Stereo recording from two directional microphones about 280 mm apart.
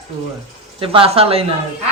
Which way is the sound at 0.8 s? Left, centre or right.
Centre.